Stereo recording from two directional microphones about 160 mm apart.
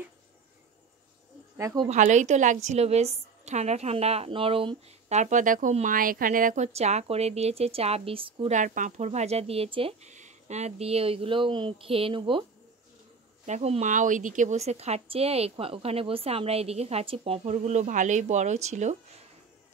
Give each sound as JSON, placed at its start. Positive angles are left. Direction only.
{"t": 1.6, "sound": "speech", "side_deg": -20}
{"t": 1.9, "sound": "speech", "side_deg": -50}
{"t": 5.2, "sound": "speech", "side_deg": -55}
{"t": 8.5, "sound": "speech", "side_deg": -55}
{"t": 10.1, "sound": "speech", "side_deg": -45}
{"t": 13.5, "sound": "speech", "side_deg": -45}